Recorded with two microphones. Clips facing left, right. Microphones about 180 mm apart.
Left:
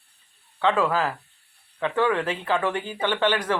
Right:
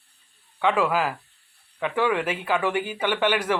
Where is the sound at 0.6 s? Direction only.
10° right (ahead or behind).